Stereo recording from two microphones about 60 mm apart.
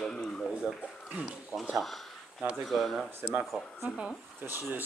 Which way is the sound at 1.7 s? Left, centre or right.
Centre.